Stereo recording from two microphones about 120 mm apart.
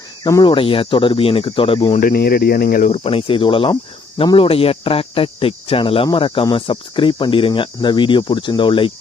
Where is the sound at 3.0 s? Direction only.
50° left (ahead or behind).